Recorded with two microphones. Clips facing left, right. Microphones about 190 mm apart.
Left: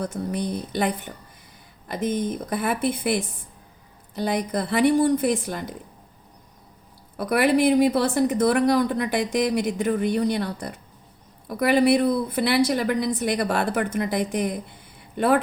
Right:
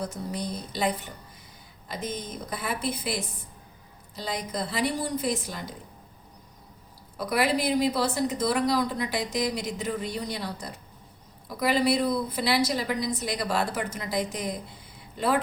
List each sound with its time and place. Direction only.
0.0 s a woman's voice: 55° left (ahead or behind)
7.2 s a woman's voice: 55° left (ahead or behind)